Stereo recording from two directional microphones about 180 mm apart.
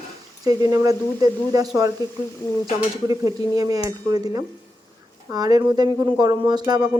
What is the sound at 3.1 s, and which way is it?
Speech, 20° right (ahead or behind).